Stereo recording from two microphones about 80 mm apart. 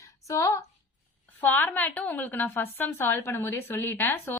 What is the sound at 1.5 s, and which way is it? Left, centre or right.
A woman's voice, left.